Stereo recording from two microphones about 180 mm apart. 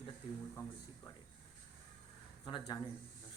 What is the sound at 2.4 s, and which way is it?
Speech, 25° left (ahead or behind).